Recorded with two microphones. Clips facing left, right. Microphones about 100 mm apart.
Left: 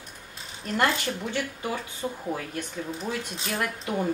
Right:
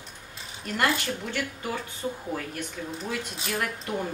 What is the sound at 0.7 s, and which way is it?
Cutlery, 5° left (ahead or behind).